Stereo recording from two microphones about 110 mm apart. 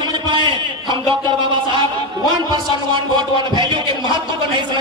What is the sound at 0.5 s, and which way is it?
Speech, 50° right (ahead or behind).